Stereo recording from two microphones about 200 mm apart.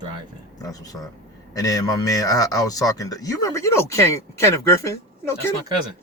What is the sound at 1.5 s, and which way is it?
Speech, 15° left (ahead or behind).